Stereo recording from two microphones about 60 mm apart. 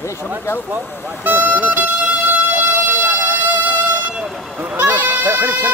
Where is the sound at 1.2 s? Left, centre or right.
Right.